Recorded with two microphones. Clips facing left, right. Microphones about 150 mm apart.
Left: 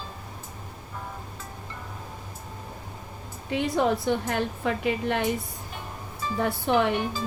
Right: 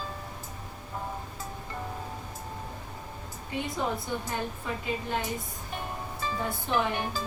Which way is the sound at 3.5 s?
75° left (ahead or behind).